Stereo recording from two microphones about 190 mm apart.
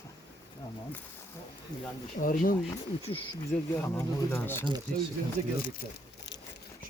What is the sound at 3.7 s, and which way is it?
Speech, 10° left (ahead or behind).